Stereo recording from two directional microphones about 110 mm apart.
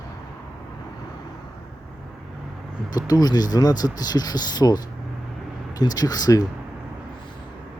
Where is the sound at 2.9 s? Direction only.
35° left (ahead or behind).